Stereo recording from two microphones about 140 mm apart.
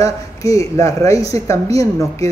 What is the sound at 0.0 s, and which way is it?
Speech, 25° left (ahead or behind).